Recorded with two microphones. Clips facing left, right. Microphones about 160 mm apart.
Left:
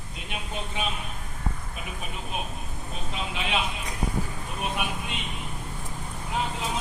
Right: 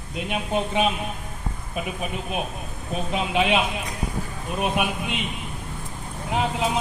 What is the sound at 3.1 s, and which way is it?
Speech, 70° right (ahead or behind).